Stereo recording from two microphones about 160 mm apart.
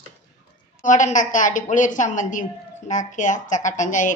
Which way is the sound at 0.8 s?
50° left (ahead or behind).